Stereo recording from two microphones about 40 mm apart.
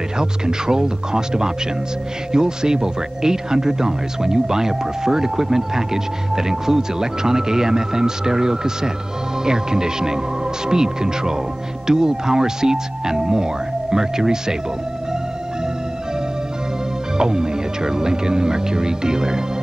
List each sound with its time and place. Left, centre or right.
0.2 s speech: centre
17.2 s speech: centre